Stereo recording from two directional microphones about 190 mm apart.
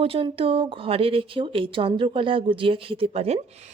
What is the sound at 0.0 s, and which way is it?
Speech, 30° right (ahead or behind).